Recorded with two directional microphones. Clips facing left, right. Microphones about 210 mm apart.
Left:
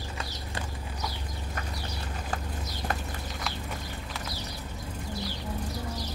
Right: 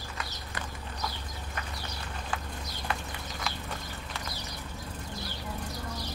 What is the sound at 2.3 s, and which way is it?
Horse, 40° left (ahead or behind).